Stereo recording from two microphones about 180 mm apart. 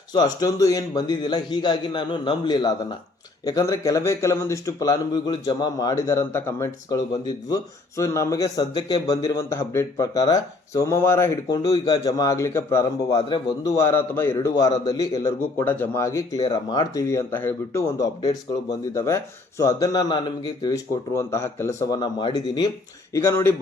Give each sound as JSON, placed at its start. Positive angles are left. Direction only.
{"t": 0.1, "sound": "a man's voice", "side_deg": 25}